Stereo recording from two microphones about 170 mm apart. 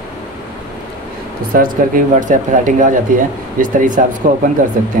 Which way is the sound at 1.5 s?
50° right (ahead or behind).